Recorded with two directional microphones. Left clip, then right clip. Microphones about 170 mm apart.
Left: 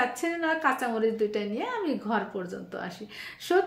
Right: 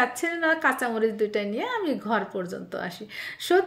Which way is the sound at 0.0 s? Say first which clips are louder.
Right 3 dB; 30° right (ahead or behind).